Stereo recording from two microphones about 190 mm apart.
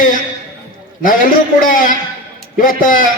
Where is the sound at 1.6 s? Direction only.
45° left (ahead or behind).